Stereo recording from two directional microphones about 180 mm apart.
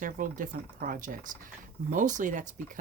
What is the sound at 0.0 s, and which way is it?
Speech, 45° right (ahead or behind).